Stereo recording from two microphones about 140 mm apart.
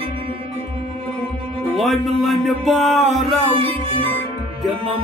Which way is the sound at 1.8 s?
Centre (ahead or behind).